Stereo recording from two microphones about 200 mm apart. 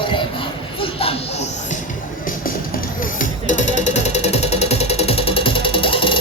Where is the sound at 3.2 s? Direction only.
40° left (ahead or behind).